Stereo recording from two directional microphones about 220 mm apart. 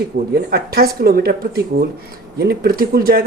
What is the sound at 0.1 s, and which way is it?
Speech, 45° right (ahead or behind).